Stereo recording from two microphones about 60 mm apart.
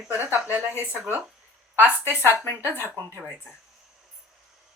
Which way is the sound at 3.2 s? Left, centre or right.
Centre.